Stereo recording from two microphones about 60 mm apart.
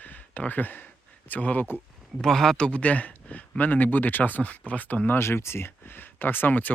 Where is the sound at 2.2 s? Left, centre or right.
Centre.